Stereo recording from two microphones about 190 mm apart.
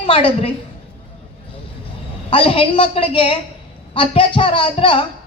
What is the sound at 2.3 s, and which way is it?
A woman's voice, 30° left (ahead or behind).